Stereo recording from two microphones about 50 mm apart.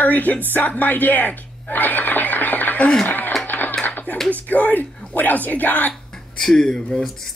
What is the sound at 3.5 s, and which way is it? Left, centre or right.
Music, left.